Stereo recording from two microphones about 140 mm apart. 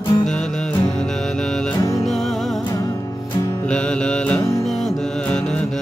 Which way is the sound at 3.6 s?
5° left (ahead or behind).